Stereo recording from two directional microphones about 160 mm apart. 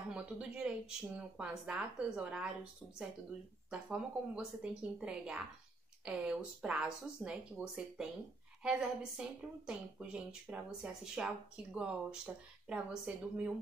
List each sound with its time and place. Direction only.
0.1 s a woman's voice: 5° right (ahead or behind)